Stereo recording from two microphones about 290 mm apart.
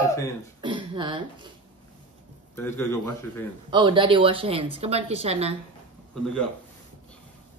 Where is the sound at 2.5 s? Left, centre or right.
Centre.